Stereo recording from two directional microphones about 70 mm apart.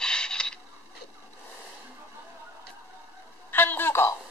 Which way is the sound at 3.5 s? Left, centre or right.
Left.